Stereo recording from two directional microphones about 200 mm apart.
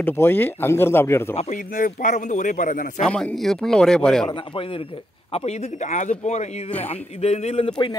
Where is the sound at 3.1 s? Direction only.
Centre (ahead or behind).